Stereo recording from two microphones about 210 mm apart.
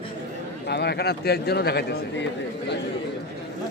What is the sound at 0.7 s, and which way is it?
Speech, 50° left (ahead or behind).